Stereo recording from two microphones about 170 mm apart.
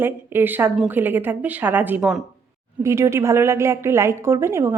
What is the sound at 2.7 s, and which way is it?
A woman's voice, 15° right (ahead or behind).